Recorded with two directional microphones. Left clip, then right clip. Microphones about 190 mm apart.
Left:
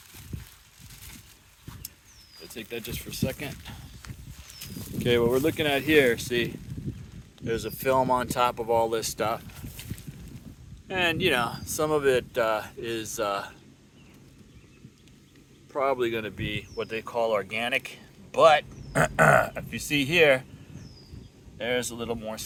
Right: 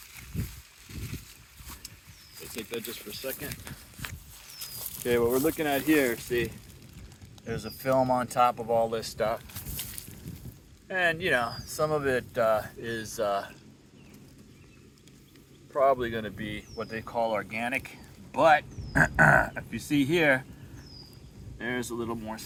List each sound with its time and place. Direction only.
2.6 s speech: 55° left (ahead or behind)
5.0 s speech: 30° left (ahead or behind)
9.6 s a sound: 60° right (ahead or behind)
10.8 s speech: 20° left (ahead or behind); by 13.5 s 5° left (ahead or behind)
15.7 s speech: 10° left (ahead or behind)
21.6 s speech: 15° left (ahead or behind)